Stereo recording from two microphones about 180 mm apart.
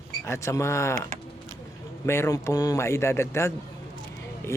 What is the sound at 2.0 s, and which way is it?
Speech, 15° left (ahead or behind).